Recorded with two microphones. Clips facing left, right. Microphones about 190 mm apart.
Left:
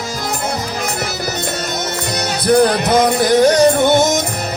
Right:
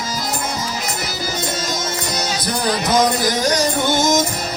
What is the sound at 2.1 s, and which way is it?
Music, 60° left (ahead or behind).